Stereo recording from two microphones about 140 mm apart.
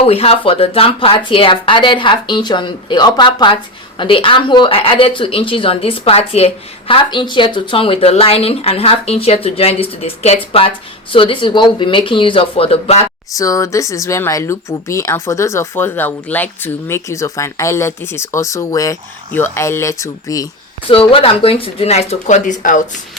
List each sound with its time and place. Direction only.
0.0 s speech: 45° left (ahead or behind)
13.3 s speech: 25° left (ahead or behind)
20.9 s speech: 40° left (ahead or behind); by 22.8 s 65° left (ahead or behind)